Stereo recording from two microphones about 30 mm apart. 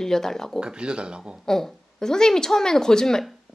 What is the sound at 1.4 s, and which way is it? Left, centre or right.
Speech, centre.